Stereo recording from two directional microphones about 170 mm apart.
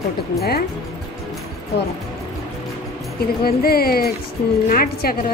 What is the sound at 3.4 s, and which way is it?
Speech, 65° left (ahead or behind).